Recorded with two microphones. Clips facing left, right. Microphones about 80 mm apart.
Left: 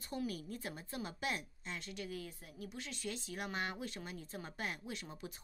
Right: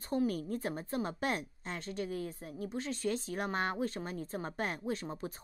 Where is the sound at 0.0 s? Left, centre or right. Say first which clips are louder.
Right 9 dB; right.